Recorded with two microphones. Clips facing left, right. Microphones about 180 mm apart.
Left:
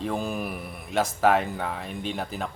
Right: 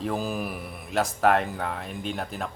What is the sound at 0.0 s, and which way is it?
A man's voice, centre (ahead or behind).